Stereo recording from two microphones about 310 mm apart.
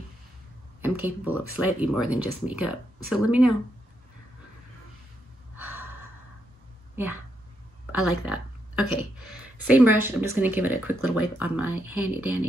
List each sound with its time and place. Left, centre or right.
0.8 s speech: centre
5.6 s gasp: centre
8.0 s speech: centre